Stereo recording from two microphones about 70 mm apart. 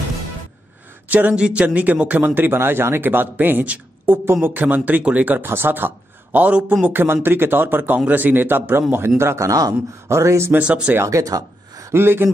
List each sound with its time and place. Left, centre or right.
1.0 s a man's voice: right
6.9 s speech: right
10.0 s speech: right
10.6 s speech: centre
11.0 s speech: right
11.9 s speech: right